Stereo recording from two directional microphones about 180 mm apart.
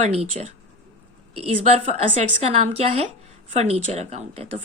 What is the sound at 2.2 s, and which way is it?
Speech, 35° right (ahead or behind).